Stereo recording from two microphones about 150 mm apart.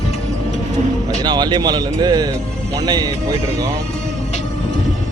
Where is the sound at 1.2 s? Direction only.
30° right (ahead or behind).